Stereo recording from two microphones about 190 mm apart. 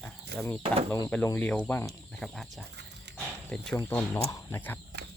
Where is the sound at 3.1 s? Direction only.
65° right (ahead or behind).